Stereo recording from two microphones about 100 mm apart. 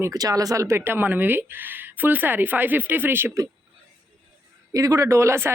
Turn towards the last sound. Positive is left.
turn(degrees=-25)  # may be behind; listen again after turning